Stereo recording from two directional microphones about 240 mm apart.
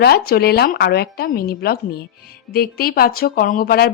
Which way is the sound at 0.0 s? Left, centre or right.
Left.